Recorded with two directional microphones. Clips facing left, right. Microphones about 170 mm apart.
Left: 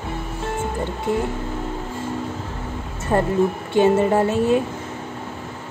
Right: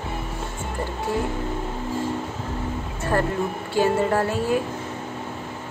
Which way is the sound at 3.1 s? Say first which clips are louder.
Left 5 dB; 20° left (ahead or behind).